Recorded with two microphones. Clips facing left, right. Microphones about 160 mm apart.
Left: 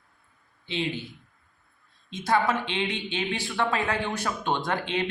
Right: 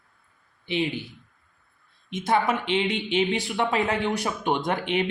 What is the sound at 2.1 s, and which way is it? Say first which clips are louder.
A woman's voice: right 1 dB; 20° right (ahead or behind).